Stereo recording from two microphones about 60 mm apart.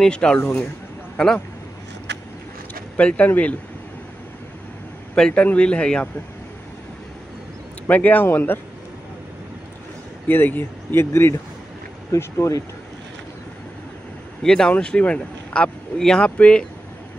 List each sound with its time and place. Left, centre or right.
0.0 s speech: centre
0.4 s speech: left
1.1 s speech: centre
3.0 s speech: left
5.1 s a man's voice: centre
7.9 s speech: left
10.2 s speech: left
12.2 s speech: left
14.4 s speech: centre